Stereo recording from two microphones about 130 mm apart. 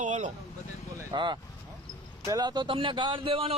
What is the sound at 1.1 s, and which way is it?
Speech, 35° right (ahead or behind).